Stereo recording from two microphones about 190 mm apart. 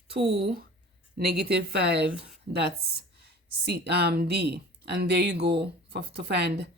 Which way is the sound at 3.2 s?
60° right (ahead or behind).